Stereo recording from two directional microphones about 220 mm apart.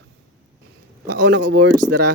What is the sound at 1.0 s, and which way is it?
Speech, 90° right.